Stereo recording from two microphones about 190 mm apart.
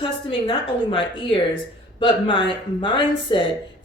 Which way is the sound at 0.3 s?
25° left (ahead or behind).